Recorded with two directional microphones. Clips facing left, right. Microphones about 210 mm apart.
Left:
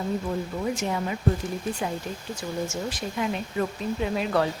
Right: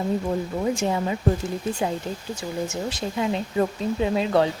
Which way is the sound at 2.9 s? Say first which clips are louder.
Right 3 dB; 25° right (ahead or behind).